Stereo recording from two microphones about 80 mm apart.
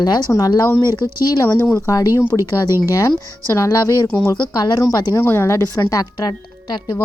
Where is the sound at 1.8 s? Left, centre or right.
Left.